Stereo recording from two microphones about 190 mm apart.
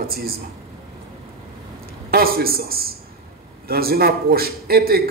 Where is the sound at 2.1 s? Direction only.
50° right (ahead or behind).